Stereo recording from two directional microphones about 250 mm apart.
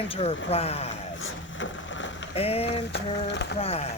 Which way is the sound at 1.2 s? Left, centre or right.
Left.